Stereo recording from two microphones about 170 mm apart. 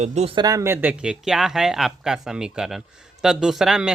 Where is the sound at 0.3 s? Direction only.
20° right (ahead or behind).